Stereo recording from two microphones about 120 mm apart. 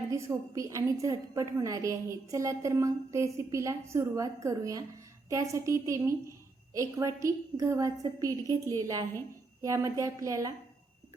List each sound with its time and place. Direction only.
0.1 s a woman's voice: 25° right (ahead or behind)